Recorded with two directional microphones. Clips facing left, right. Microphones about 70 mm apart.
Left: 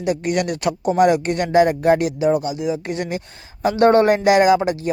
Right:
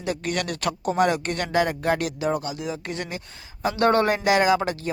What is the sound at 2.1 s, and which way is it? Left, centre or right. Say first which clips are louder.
Speech: left 7 dB; centre.